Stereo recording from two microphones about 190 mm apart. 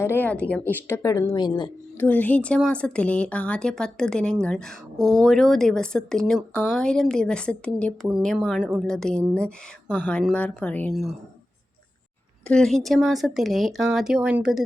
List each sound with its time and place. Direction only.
0.0 s a woman's voice: 10° left (ahead or behind)
2.0 s a woman's voice: 10° left (ahead or behind)
12.5 s speech: 5° left (ahead or behind)